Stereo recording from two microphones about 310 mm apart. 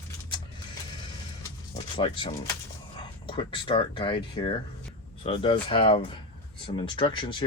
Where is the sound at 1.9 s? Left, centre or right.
Centre.